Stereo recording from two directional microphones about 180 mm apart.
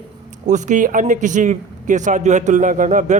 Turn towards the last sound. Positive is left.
turn(degrees=-45)  # may be behind; listen again after turning